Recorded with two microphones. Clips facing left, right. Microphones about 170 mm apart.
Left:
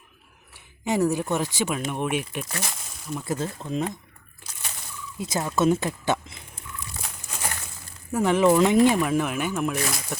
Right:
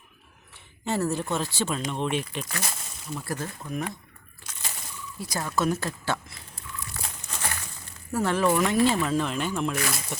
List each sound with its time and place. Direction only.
0.9 s speech: 15° left (ahead or behind)
2.6 s a sound: centre (ahead or behind)
3.2 s speech: 20° left (ahead or behind)
5.1 s speech: 20° left (ahead or behind)
7.0 s crumpling: 10° left (ahead or behind)
8.1 s speech: 15° left (ahead or behind)